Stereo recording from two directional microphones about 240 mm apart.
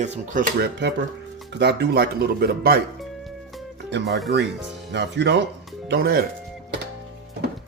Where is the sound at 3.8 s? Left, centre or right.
Right.